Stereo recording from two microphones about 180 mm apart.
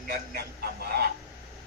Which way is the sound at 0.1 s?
60° right (ahead or behind).